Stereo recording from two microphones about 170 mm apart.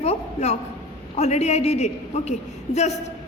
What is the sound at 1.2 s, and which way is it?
A woman's voice, 40° left (ahead or behind).